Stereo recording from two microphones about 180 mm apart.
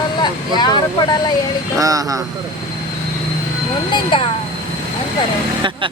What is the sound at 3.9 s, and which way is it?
Speech, 25° left (ahead or behind).